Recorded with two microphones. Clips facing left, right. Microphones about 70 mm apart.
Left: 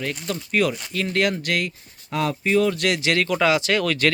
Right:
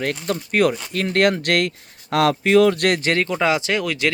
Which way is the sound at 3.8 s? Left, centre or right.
Centre.